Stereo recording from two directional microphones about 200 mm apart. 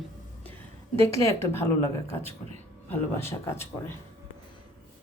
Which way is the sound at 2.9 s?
10° left (ahead or behind).